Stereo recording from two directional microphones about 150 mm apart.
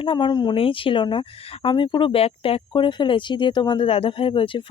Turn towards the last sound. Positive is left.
turn(degrees=35)  # may be behind; listen again after turning